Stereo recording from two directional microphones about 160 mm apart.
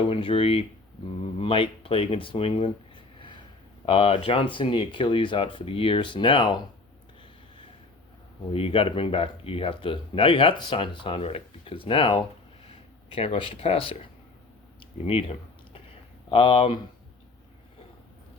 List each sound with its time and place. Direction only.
0.1 s speech: 35° left (ahead or behind)
8.5 s speech: 35° left (ahead or behind)
14.8 s a sound: 35° left (ahead or behind)
16.3 s speech: 35° left (ahead or behind)